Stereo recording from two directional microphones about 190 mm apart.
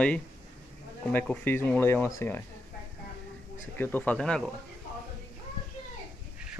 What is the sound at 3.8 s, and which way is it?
Speech, 10° left (ahead or behind).